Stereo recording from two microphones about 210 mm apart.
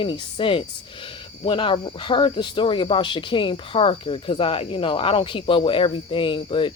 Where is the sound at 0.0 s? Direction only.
25° left (ahead or behind).